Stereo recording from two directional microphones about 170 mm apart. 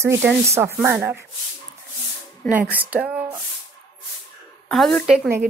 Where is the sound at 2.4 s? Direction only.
5° left (ahead or behind).